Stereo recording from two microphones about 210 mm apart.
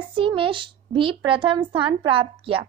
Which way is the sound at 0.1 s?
25° right (ahead or behind).